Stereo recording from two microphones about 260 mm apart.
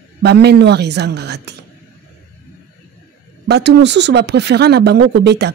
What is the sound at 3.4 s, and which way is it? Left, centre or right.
Speech, right.